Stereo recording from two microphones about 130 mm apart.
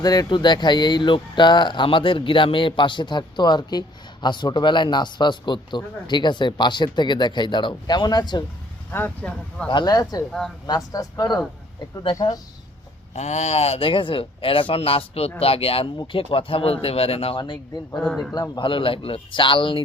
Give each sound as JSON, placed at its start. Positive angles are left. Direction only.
{"t": 0.0, "sound": "speech", "side_deg": 30}
{"t": 8.9, "sound": "speech", "side_deg": 15}
{"t": 9.6, "sound": "speech", "side_deg": 35}
{"t": 13.1, "sound": "speech", "side_deg": 60}
{"t": 18.0, "sound": "a man's voice", "side_deg": 5}
{"t": 18.3, "sound": "speech", "side_deg": 30}